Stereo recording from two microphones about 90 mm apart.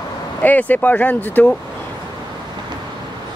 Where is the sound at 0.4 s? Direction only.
20° left (ahead or behind).